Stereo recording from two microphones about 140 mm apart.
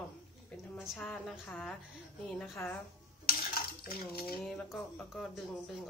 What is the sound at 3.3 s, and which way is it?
Dishes, 90° left.